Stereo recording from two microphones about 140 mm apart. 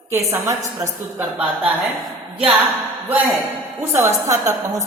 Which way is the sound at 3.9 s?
20° right (ahead or behind).